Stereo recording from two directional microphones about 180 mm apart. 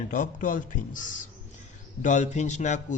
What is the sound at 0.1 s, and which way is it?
Speech, 50° left (ahead or behind).